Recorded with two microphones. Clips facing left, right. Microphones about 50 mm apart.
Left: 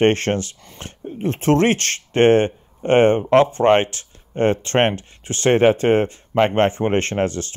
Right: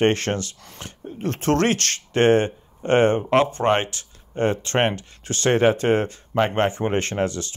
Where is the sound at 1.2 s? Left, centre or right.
Centre.